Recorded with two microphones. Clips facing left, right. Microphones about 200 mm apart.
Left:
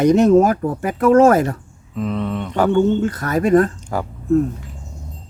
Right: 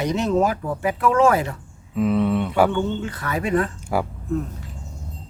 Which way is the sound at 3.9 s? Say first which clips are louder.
Right 1 dB; 10° right (ahead or behind).